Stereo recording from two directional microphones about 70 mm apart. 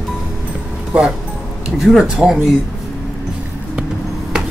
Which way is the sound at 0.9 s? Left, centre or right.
Centre.